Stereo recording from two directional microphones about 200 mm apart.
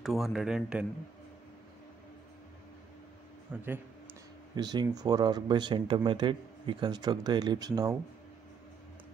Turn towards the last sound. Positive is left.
turn(degrees=-20)  # may be behind; listen again after turning